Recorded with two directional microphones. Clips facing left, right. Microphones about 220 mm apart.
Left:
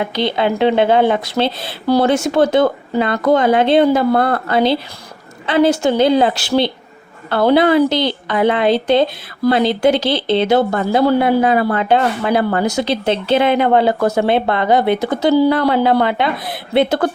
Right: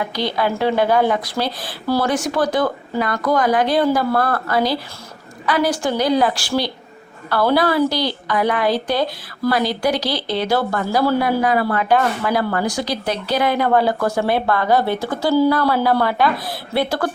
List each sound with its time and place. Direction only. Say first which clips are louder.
0.0 s speech: left 4 dB; 25° left (ahead or behind)